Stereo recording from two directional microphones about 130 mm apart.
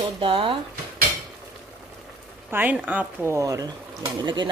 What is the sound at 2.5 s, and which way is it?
Speech, 10° right (ahead or behind).